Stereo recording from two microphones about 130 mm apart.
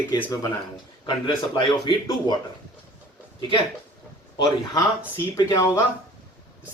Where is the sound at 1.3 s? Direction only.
35° left (ahead or behind).